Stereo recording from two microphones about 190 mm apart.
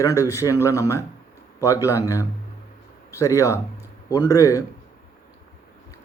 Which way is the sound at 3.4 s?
15° left (ahead or behind).